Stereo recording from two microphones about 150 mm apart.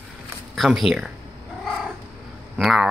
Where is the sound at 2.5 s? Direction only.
Centre (ahead or behind).